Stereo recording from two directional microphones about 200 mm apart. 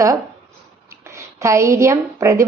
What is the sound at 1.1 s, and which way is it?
A woman's voice, 15° right (ahead or behind).